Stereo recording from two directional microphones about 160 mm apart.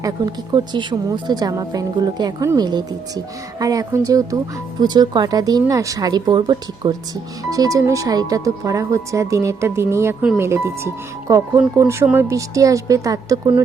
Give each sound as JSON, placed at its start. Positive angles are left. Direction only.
{"t": 0.5, "sound": "speech", "side_deg": -30}